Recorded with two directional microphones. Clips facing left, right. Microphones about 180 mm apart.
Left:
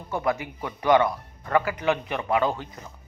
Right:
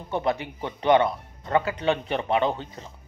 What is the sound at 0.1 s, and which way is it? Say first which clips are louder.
Speech: right 1 dB; 25° right (ahead or behind).